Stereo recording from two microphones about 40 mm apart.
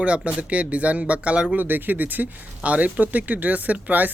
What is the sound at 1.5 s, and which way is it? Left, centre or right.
Speech, right.